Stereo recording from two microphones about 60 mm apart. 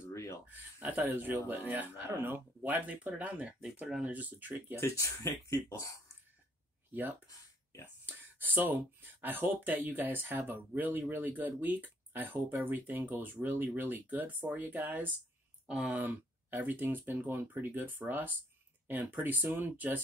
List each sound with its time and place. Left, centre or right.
0.1 s a sound: left
0.7 s speech: right
4.7 s speech: left
5.2 s speech: left
6.9 s speech: right
8.0 s a sound: right
9.2 s speech: right